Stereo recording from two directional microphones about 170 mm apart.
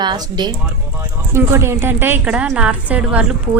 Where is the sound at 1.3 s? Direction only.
15° right (ahead or behind).